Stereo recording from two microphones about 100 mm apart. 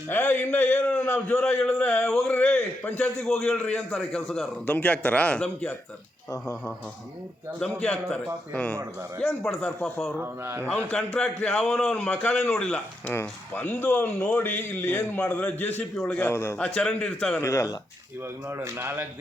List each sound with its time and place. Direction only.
0.1 s a man's voice: 20° left (ahead or behind)
3.8 s a man's voice: centre (ahead or behind)
7.8 s a man's voice: 10° left (ahead or behind)
10.2 s speech: 25° right (ahead or behind)
10.7 s a man's voice: 15° left (ahead or behind)
16.2 s a man's voice: 25° left (ahead or behind)
16.6 s a man's voice: 10° left (ahead or behind)
17.4 s a man's voice: 30° left (ahead or behind)
18.4 s speech: 30° right (ahead or behind)